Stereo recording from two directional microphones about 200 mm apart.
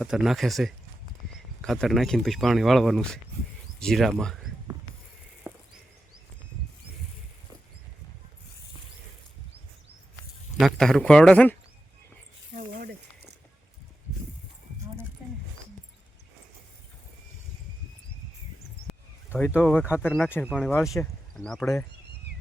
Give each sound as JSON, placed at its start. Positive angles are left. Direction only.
{"t": 0.0, "sound": "speech", "side_deg": 0}
{"t": 10.6, "sound": "speech", "side_deg": 0}
{"t": 12.5, "sound": "snake", "side_deg": -50}
{"t": 19.3, "sound": "speech", "side_deg": 10}
{"t": 22.3, "sound": "a sound", "side_deg": -55}